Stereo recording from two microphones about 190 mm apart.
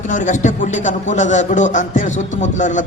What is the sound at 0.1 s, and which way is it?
A man's voice, 40° left (ahead or behind).